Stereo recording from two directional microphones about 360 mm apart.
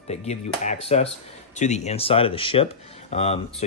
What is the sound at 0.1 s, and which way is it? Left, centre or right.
Speech, centre.